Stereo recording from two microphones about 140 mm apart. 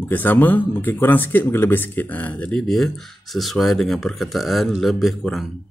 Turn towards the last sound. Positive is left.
turn(degrees=0)  # may be behind; listen again after turning